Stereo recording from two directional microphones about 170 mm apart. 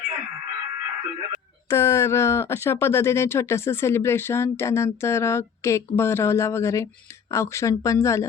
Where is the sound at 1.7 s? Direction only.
15° left (ahead or behind).